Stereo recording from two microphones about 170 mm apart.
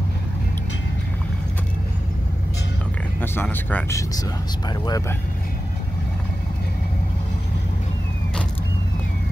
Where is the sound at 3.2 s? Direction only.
10° left (ahead or behind).